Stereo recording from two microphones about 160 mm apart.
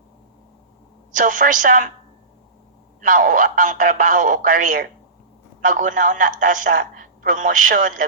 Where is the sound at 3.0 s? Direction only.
55° right (ahead or behind).